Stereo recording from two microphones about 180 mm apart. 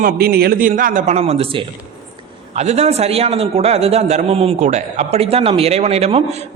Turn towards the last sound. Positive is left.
turn(degrees=-35)  # may be behind; listen again after turning